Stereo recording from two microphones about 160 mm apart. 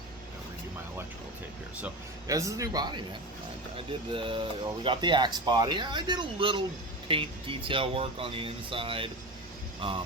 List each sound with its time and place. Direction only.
2.2 s speech: 20° right (ahead or behind)